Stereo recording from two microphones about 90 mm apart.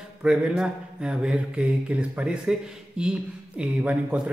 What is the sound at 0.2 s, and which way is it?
A man's voice, 10° right (ahead or behind).